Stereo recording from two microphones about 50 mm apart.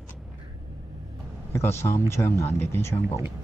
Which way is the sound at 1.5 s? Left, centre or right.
Left.